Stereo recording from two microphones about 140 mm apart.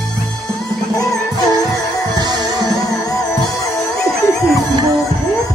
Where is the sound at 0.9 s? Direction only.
25° left (ahead or behind).